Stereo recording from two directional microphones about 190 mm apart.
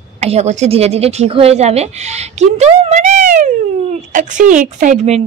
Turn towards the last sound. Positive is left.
turn(degrees=-35)  # may be behind; listen again after turning